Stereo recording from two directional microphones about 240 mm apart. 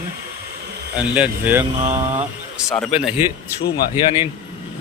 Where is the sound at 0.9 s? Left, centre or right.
Centre.